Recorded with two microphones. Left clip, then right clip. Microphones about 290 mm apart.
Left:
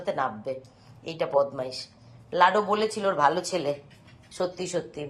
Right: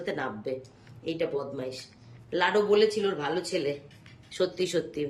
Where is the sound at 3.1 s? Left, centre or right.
Left.